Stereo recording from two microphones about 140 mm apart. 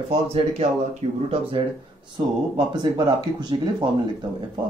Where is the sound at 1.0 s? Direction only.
50° right (ahead or behind).